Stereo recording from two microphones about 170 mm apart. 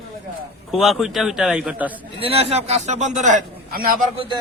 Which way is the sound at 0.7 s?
5° right (ahead or behind).